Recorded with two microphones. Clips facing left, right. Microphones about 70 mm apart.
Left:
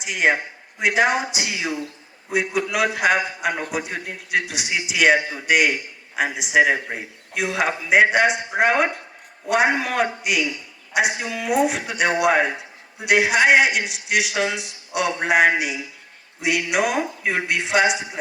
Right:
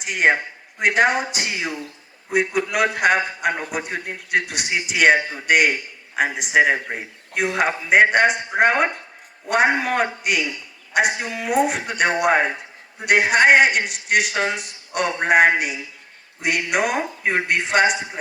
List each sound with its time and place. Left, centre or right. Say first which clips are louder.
0.0 s a man's voice: right 2 dB; right
3.7 s a man's voice: even; right